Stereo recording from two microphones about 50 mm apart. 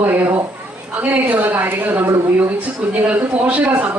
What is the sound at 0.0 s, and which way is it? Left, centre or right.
Speech, right.